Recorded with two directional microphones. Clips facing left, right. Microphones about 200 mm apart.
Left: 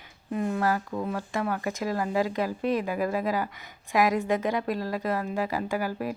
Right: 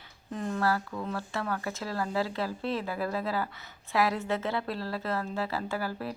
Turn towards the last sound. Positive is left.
turn(degrees=15)  # may be behind; listen again after turning